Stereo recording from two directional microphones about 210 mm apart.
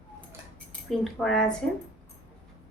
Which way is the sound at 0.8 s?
Centre (ahead or behind).